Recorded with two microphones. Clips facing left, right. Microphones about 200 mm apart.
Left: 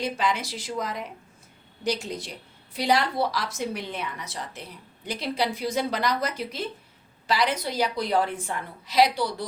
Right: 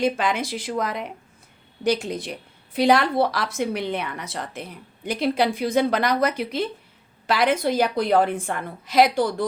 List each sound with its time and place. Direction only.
0.0 s a woman's voice: 55° right (ahead or behind)
7.3 s a woman's voice: 50° right (ahead or behind)